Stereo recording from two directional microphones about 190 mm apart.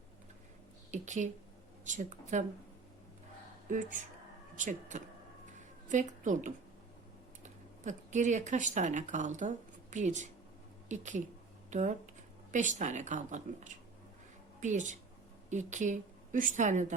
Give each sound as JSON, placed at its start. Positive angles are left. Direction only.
{"t": 0.9, "sound": "a woman's voice", "side_deg": -40}
{"t": 4.5, "sound": "a woman's voice", "side_deg": -40}